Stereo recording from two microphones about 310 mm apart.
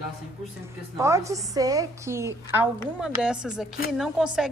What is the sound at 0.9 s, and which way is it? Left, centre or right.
A woman's voice, centre.